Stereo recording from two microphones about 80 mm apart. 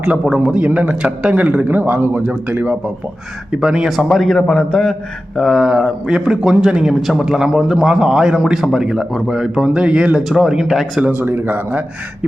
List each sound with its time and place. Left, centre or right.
0.0 s a man's voice: centre
3.5 s a man's voice: centre
5.4 s a man's voice: centre
11.2 s a man's voice: right